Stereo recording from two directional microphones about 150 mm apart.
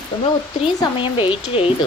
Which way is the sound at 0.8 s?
35° left (ahead or behind).